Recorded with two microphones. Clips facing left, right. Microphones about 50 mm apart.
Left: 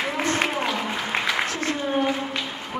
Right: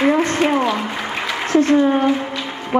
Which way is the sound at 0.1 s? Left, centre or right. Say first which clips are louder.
Right 7 dB; right.